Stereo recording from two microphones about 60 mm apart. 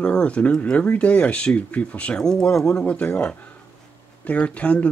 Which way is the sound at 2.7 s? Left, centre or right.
Left.